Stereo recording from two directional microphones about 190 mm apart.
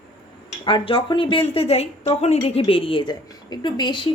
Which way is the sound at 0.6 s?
25° left (ahead or behind).